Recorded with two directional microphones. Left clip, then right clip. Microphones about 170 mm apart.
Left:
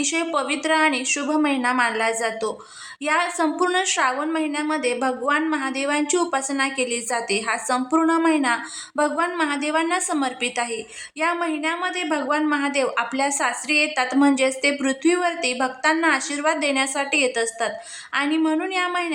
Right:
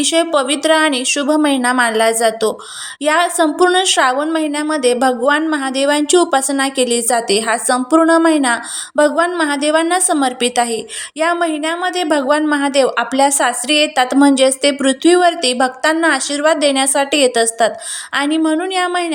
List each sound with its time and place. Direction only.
0.0 s a woman's voice: 25° right (ahead or behind)